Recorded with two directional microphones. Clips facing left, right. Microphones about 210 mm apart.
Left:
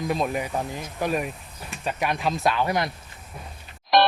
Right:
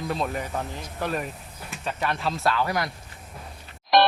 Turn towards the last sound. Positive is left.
turn(degrees=0)  # may be behind; listen again after turning